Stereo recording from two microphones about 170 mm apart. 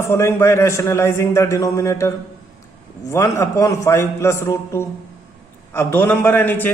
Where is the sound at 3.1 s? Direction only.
15° left (ahead or behind).